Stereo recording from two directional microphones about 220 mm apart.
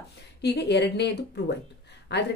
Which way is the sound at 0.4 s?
50° left (ahead or behind).